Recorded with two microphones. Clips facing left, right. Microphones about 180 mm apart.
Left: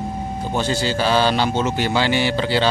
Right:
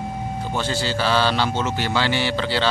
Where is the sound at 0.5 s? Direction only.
15° left (ahead or behind).